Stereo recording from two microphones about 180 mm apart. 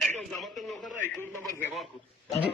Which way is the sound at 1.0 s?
10° left (ahead or behind).